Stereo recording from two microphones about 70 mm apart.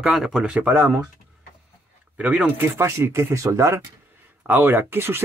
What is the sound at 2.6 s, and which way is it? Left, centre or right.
Speech, right.